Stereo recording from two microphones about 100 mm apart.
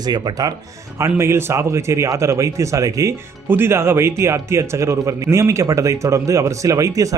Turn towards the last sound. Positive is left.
turn(degrees=-35)  # may be behind; listen again after turning